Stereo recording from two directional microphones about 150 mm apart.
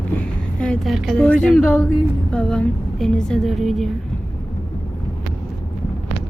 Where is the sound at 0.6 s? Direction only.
5° left (ahead or behind).